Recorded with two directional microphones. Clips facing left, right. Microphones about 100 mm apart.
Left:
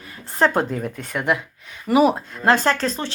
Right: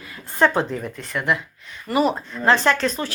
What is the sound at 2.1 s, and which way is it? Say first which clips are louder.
Speech: left 1 dB; 45° left (ahead or behind).